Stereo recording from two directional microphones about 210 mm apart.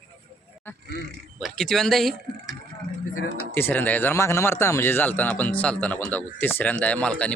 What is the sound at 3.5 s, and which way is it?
Speech, 10° left (ahead or behind).